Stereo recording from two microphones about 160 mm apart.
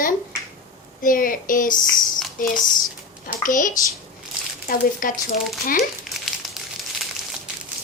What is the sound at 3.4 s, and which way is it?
Speech, 55° left (ahead or behind).